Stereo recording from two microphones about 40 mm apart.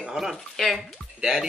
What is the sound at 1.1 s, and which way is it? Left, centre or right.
Speech, centre.